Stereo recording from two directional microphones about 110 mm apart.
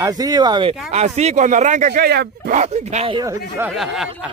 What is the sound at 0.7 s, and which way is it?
Speech, 90° right.